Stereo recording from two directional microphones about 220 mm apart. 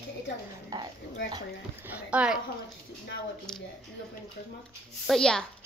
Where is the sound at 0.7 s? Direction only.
15° right (ahead or behind).